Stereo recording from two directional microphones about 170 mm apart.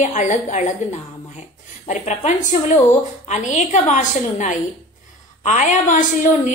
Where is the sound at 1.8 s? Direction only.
45° left (ahead or behind).